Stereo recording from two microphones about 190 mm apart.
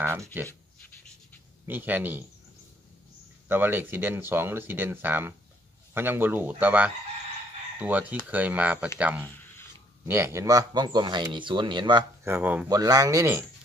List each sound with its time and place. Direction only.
0.0 s speech: 10° right (ahead or behind)
1.7 s speech: 10° right (ahead or behind)
3.4 s speech: 10° right (ahead or behind)
12.3 s speech: 10° right (ahead or behind)